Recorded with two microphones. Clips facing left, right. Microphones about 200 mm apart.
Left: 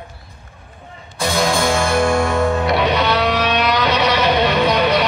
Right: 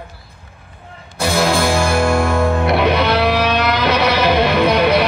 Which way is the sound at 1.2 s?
5° right (ahead or behind).